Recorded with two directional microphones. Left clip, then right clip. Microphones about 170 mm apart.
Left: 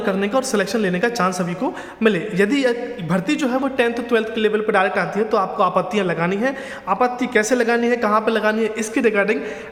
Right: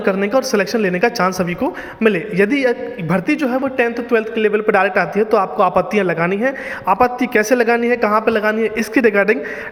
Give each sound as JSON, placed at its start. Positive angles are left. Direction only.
{"t": 0.0, "sound": "a man's voice", "side_deg": -20}
{"t": 4.6, "sound": "a man's voice", "side_deg": -25}